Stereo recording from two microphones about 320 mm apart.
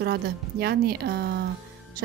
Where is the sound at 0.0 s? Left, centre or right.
Right.